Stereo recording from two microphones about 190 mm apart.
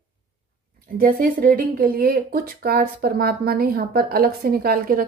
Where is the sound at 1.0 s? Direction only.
50° right (ahead or behind).